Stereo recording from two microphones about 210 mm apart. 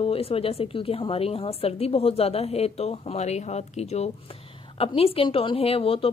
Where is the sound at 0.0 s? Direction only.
25° left (ahead or behind).